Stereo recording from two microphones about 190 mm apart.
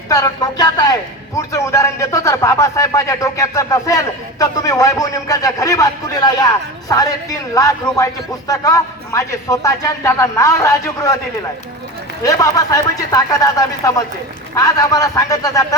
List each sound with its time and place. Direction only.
0.1 s speech: 20° left (ahead or behind)
12.2 s speech: 20° left (ahead or behind)